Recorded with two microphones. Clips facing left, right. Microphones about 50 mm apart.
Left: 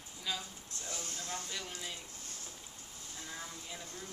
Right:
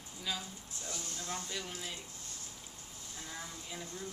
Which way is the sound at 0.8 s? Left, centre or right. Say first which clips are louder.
Even; left.